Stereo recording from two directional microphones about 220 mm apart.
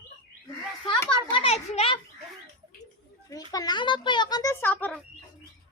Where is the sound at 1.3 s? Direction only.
25° left (ahead or behind).